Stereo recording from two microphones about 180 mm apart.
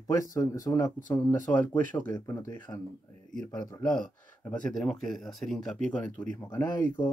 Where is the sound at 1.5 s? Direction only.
5° left (ahead or behind).